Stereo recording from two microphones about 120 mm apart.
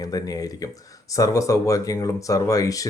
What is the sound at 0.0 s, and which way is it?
Speech, 30° left (ahead or behind).